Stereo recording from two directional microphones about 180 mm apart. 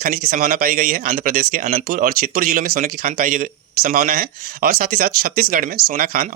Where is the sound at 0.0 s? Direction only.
50° right (ahead or behind).